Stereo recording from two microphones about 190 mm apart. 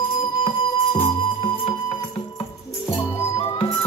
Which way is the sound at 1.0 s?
30° left (ahead or behind).